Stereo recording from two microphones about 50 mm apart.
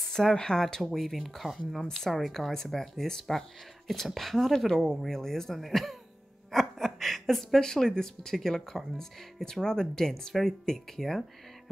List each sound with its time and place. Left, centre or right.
0.1 s a woman's voice: centre